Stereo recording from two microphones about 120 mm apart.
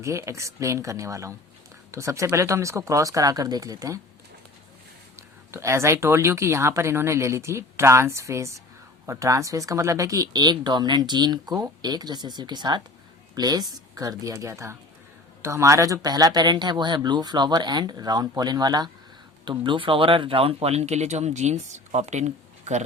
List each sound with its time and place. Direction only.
0.0 s speech: 25° right (ahead or behind)
5.5 s speech: 25° right (ahead or behind)
19.5 s speech: 45° right (ahead or behind); by 22.8 s 75° right (ahead or behind)